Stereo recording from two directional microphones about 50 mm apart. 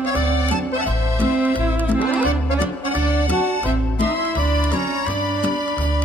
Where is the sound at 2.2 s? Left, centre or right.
Right.